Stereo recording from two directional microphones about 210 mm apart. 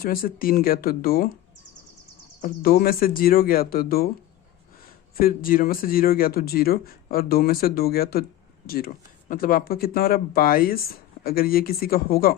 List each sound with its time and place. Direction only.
0.0 s speech: 45° left (ahead or behind)
2.4 s speech: 45° left (ahead or behind)
5.2 s speech: 45° left (ahead or behind)